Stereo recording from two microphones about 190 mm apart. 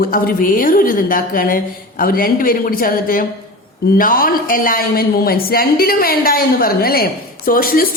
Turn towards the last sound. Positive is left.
turn(degrees=50)  # may be behind; listen again after turning